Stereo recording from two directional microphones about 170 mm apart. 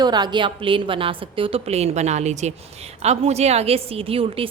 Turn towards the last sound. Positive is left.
turn(degrees=-35)  # may be behind; listen again after turning